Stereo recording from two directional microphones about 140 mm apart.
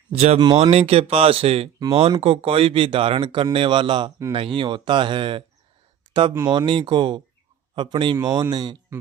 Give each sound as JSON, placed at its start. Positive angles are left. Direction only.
{"t": 0.1, "sound": "speech", "side_deg": -45}
{"t": 6.4, "sound": "speech", "side_deg": -30}